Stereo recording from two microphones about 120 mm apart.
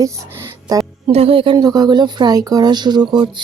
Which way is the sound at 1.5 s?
35° right (ahead or behind).